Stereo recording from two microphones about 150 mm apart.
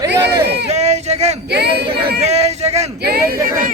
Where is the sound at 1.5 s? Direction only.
90° right.